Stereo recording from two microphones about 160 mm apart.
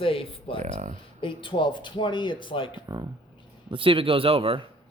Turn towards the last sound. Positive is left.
turn(degrees=-35)  # may be behind; listen again after turning